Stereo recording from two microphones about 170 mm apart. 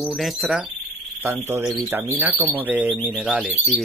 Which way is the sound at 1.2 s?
15° right (ahead or behind).